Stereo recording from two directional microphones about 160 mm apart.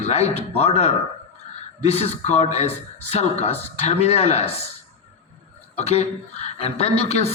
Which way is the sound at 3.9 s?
40° left (ahead or behind).